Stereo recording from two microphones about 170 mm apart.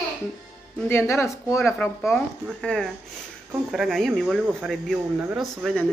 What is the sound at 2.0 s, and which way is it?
A woman's voice, centre (ahead or behind).